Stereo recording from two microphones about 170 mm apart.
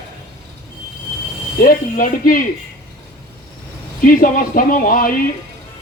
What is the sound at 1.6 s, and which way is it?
Speech, 55° left (ahead or behind).